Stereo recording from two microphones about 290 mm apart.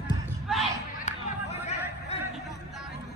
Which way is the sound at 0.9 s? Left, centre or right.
Left.